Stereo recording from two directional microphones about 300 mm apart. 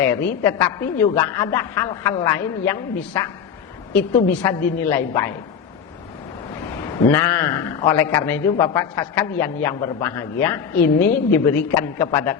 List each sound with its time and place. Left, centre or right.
0.0 s a man's voice: centre
7.1 s a man's voice: centre